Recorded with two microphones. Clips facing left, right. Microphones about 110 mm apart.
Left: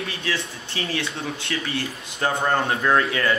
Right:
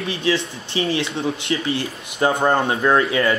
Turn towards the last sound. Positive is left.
turn(degrees=-20)  # may be behind; listen again after turning